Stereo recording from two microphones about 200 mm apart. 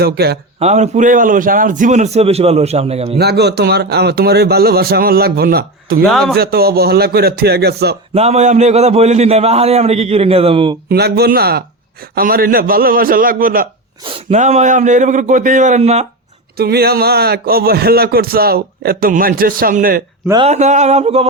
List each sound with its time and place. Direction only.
0.0 s a man's voice: 55° right (ahead or behind)
0.6 s a man's voice: 35° right (ahead or behind)
3.2 s a man's voice: 55° right (ahead or behind)
6.1 s a man's voice: centre (ahead or behind)
6.3 s a man's voice: 50° right (ahead or behind)
8.1 s a man's voice: 30° right (ahead or behind)
10.8 s a man's voice: 55° right (ahead or behind)
14.0 s a man's voice: 30° right (ahead or behind)
16.6 s a man's voice: 50° right (ahead or behind)
20.4 s a man's voice: 35° right (ahead or behind)